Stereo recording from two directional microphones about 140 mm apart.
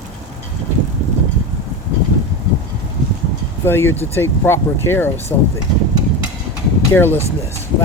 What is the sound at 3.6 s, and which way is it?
Speech, 15° left (ahead or behind).